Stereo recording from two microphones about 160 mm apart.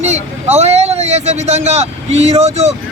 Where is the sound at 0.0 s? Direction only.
45° right (ahead or behind).